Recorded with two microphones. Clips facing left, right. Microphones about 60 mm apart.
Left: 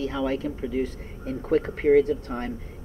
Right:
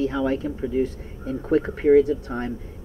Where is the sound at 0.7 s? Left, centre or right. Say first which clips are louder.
Right 4 dB; left.